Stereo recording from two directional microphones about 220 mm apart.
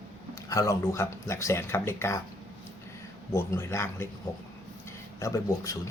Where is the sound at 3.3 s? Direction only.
10° left (ahead or behind).